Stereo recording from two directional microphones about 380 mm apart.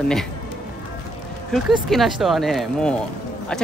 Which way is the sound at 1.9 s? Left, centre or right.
Centre.